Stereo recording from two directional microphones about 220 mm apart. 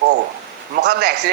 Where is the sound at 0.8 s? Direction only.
50° right (ahead or behind).